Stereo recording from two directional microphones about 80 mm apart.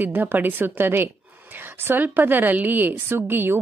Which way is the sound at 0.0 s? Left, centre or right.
Right.